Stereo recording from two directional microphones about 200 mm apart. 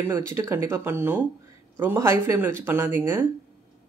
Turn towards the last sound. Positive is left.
turn(degrees=-10)  # may be behind; listen again after turning